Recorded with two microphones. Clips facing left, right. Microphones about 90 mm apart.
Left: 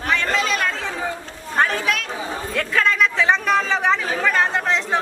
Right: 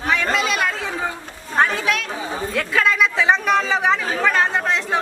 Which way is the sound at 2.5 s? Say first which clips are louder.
Even; 5° right (ahead or behind).